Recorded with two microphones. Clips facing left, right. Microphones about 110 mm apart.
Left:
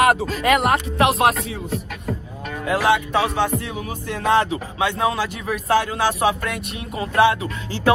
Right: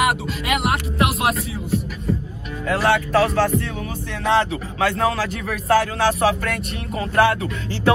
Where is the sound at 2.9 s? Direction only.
Centre (ahead or behind).